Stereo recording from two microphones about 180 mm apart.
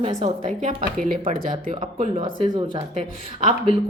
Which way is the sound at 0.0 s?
40° right (ahead or behind).